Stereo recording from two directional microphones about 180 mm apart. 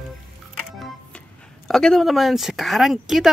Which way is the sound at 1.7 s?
Centre (ahead or behind).